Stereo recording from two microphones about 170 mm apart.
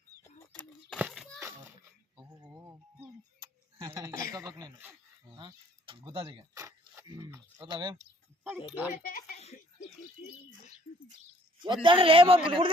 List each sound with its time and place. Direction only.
0.3 s bird: 5° left (ahead or behind)
0.9 s a sound: 5° right (ahead or behind)
1.4 s a sound: 15° right (ahead or behind)
4.4 s a man's voice: 20° right (ahead or behind)
6.2 s a man's voice: 20° right (ahead or behind)
8.7 s a child's voice: 10° right (ahead or behind)
9.0 s a child's voice: 55° left (ahead or behind)
11.6 s a man's voice: 30° right (ahead or behind)